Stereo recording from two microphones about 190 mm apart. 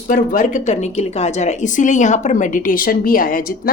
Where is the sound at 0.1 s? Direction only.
45° left (ahead or behind).